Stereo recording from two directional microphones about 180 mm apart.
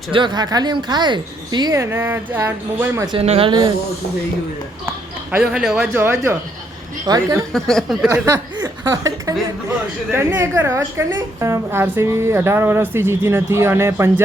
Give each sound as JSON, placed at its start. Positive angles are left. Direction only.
{"t": 0.1, "sound": "speech", "side_deg": -25}
{"t": 3.1, "sound": "speech", "side_deg": -30}
{"t": 5.3, "sound": "speech", "side_deg": -5}
{"t": 7.5, "sound": "speech", "side_deg": 0}
{"t": 8.1, "sound": "speech", "side_deg": -15}